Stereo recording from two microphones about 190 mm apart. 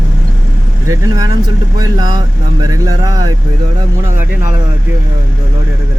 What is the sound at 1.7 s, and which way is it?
Speech, 20° right (ahead or behind).